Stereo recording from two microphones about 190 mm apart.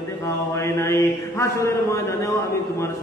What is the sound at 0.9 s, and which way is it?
Mantra, 15° left (ahead or behind).